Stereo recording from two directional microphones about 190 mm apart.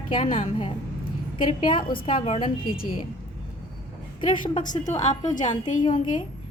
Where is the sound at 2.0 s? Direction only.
30° left (ahead or behind).